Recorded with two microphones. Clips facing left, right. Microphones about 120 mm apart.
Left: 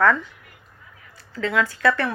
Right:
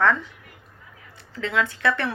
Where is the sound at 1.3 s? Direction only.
25° right (ahead or behind).